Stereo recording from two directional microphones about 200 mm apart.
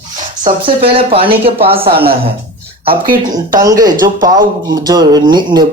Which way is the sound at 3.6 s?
15° right (ahead or behind).